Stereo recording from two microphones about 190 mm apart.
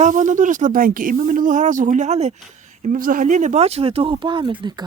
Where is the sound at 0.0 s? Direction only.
40° right (ahead or behind).